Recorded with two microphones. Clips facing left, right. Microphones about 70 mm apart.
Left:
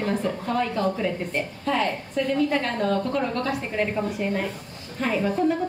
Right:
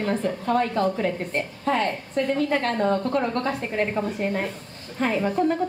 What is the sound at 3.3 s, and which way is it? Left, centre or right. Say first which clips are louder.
A child's voice: right 1 dB; right.